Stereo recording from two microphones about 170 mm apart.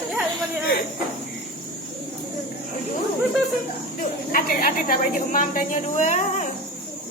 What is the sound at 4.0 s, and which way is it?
A woman's voice, 55° left (ahead or behind).